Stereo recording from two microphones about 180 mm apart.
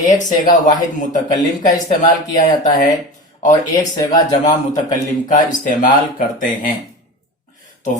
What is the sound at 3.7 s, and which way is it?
Speech, 20° left (ahead or behind).